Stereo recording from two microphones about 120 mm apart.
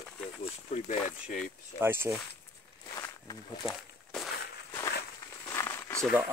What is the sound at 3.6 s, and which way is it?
Walk, centre (ahead or behind).